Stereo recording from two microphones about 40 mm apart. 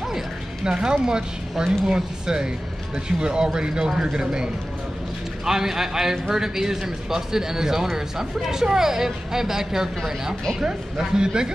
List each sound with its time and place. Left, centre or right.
0.7 s a man's voice: right